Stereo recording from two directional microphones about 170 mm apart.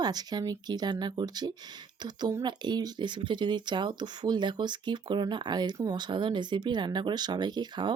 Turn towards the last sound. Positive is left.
turn(degrees=-25)  # may be behind; listen again after turning